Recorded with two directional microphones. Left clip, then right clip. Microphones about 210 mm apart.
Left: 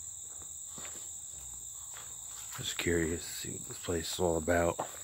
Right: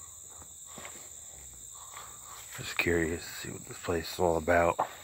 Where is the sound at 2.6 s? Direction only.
5° left (ahead or behind); by 4.9 s 25° left (ahead or behind).